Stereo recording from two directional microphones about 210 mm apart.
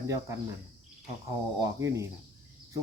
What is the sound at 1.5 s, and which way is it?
Speech, 15° right (ahead or behind).